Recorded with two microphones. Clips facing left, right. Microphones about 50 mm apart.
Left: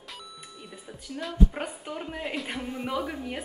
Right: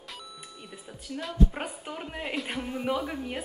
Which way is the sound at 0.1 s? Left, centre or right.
Centre.